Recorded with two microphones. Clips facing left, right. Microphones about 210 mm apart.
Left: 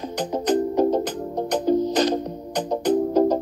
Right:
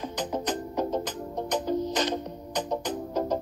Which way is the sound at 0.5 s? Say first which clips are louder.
Left 14 dB; 35° left (ahead or behind).